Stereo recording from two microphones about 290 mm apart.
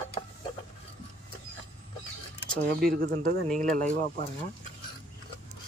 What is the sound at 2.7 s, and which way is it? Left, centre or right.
Speech, right.